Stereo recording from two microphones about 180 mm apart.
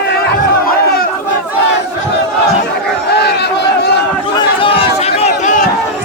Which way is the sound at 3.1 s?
65° left (ahead or behind).